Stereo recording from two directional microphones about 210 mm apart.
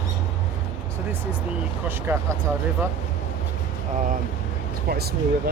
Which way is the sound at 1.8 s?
10° right (ahead or behind).